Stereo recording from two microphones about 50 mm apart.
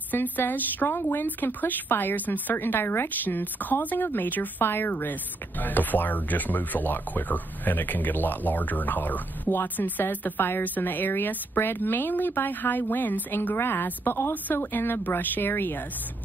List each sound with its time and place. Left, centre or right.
0.1 s speech: left